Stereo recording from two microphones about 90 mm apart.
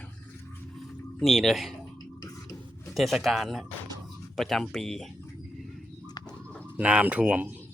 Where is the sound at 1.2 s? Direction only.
Centre (ahead or behind).